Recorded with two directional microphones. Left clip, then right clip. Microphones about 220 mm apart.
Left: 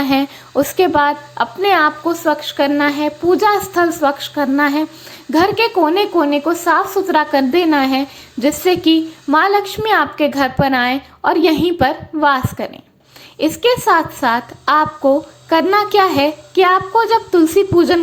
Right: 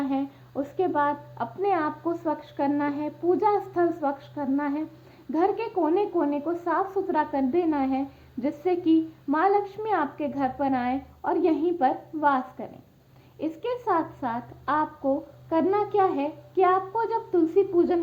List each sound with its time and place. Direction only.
0.0 s a woman's voice: 30° left (ahead or behind)